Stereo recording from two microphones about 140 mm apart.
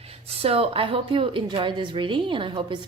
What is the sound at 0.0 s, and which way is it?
Speech, 45° right (ahead or behind).